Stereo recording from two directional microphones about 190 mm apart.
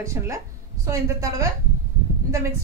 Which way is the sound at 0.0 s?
15° right (ahead or behind).